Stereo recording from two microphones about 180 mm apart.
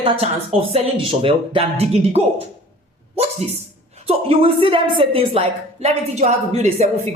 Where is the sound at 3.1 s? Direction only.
35° right (ahead or behind).